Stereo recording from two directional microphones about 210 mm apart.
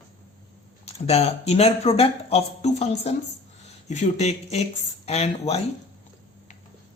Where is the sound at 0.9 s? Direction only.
30° left (ahead or behind).